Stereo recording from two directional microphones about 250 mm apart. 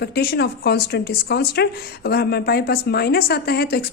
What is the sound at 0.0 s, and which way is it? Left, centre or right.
A woman's voice, left.